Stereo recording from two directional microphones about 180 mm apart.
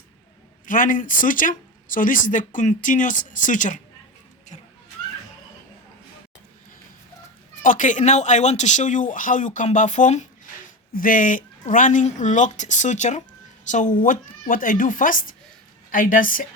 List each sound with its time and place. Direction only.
0.6 s speech: 45° left (ahead or behind)
7.6 s speech: 45° left (ahead or behind)